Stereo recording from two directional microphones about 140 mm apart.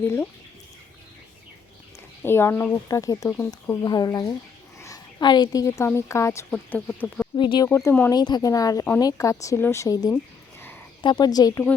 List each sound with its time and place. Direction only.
2.2 s a woman's voice: 15° left (ahead or behind)
7.3 s speech: 35° left (ahead or behind)
7.7 s speech: 20° left (ahead or behind)
8.1 s a woman's voice: 30° left (ahead or behind)